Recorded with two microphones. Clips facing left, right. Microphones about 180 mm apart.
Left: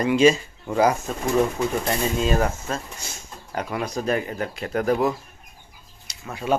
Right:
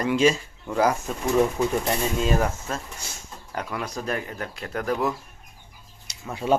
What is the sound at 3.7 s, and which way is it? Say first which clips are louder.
Speech: left 5 dB; 20° left (ahead or behind).